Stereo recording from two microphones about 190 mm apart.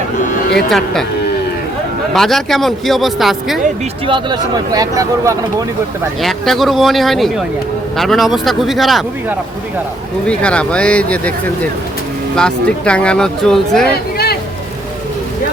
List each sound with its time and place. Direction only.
2.1 s speech: centre (ahead or behind)
4.0 s speech: 25° right (ahead or behind)
6.2 s speech: centre (ahead or behind)
10.2 s speech: 5° left (ahead or behind)
12.4 s speech: 5° left (ahead or behind)
13.9 s music: 55° left (ahead or behind)